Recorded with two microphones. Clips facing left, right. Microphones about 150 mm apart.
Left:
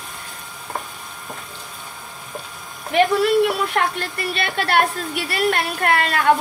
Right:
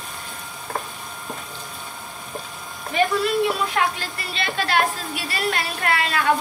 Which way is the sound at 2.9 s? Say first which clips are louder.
Left 4 dB; 70° left (ahead or behind).